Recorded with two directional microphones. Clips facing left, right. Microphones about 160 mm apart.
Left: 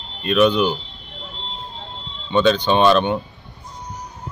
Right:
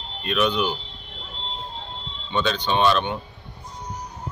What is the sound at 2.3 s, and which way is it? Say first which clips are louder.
Speech: left 7 dB; 45° left (ahead or behind).